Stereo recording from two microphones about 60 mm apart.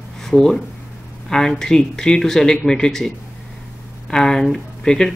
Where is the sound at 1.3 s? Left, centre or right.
Centre.